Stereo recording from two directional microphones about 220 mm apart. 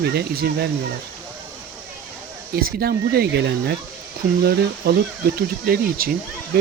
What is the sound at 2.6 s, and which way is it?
Speech, 45° right (ahead or behind).